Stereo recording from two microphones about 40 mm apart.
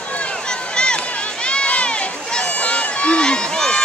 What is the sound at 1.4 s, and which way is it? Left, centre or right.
Run, left.